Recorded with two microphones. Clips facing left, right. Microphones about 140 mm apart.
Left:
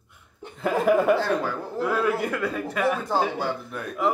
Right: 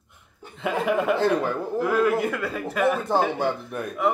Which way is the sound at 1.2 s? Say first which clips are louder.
Right 3 dB; 15° right (ahead or behind).